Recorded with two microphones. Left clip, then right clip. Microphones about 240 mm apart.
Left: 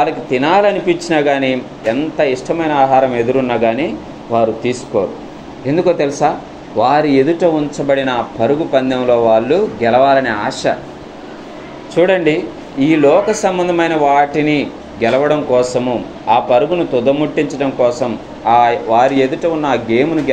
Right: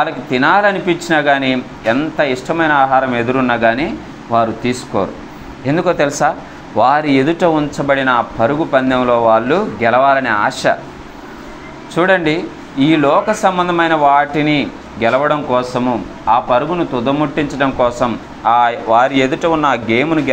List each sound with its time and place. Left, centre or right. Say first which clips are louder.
0.0 s speech: even; right
4.6 s speech: left 1 dB; right
5.7 s speech: even; right
11.9 s a man's voice: left 1 dB; right